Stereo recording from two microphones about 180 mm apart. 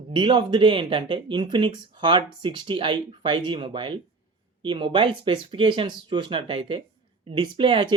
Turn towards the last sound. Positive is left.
turn(degrees=-30)  # may be behind; listen again after turning